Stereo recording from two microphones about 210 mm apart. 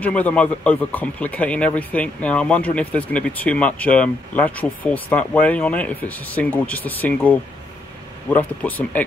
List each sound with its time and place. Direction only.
0.0 s speech: 5° left (ahead or behind)